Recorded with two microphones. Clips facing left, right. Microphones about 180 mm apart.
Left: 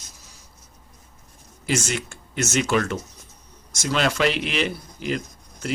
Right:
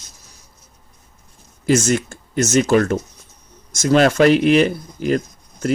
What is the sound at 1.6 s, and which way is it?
Speech, 45° right (ahead or behind).